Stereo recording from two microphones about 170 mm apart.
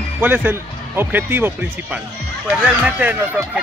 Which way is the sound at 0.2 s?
10° right (ahead or behind).